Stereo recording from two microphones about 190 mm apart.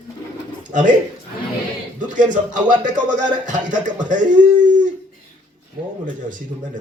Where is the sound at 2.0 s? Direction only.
45° right (ahead or behind).